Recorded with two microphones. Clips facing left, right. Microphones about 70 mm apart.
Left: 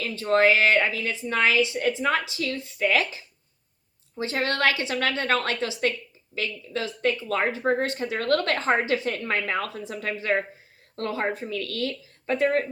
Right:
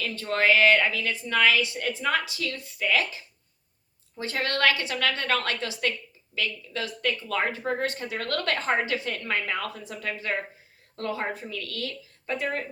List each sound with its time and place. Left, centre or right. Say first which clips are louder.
0.0 s a woman's voice: left 5 dB; left
4.1 s a woman's voice: left 3 dB; left